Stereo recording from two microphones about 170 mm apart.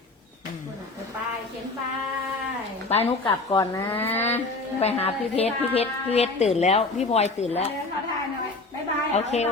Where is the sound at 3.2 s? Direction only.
20° left (ahead or behind).